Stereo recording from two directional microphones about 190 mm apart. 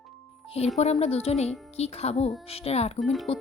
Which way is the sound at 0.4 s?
30° left (ahead or behind).